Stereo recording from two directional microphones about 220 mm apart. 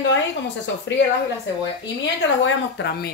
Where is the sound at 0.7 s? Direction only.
55° left (ahead or behind).